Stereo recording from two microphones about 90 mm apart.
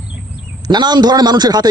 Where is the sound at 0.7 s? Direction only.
55° right (ahead or behind).